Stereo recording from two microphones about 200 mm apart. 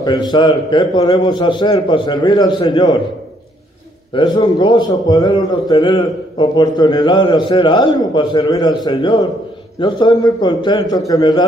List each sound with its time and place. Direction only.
0.0 s a man's voice: 20° left (ahead or behind)
4.1 s a man's voice: 20° left (ahead or behind)